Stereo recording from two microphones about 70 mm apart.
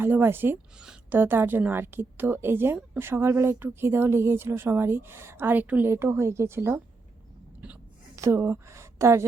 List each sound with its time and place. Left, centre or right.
0.0 s speech: right
5.9 s speech: right
7.6 s a sound: centre
8.1 s a woman's voice: right